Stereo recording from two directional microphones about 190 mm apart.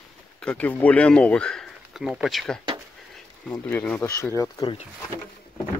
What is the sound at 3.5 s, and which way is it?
Speech, 10° left (ahead or behind).